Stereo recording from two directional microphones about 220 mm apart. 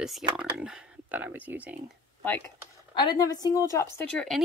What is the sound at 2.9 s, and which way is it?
Speech, 15° left (ahead or behind).